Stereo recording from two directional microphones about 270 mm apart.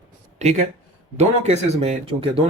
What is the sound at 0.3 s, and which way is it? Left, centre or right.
Speech, right.